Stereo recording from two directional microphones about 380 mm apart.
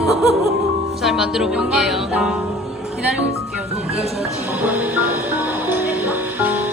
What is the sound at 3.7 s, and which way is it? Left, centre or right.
Music, centre.